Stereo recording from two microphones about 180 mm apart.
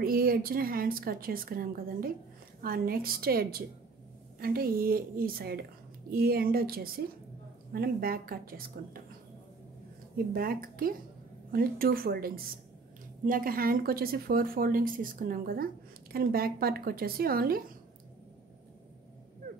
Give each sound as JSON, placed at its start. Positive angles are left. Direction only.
{"t": 0.0, "sound": "speech", "side_deg": -55}
{"t": 10.1, "sound": "speech", "side_deg": -55}